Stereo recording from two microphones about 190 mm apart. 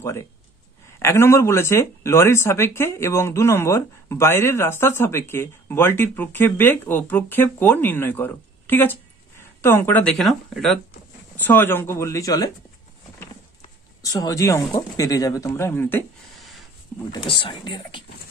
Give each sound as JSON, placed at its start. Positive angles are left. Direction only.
{"t": 0.0, "sound": "speech", "side_deg": 15}
{"t": 14.0, "sound": "speech", "side_deg": 20}
{"t": 16.3, "sound": "a sound", "side_deg": 0}
{"t": 17.1, "sound": "speech", "side_deg": 25}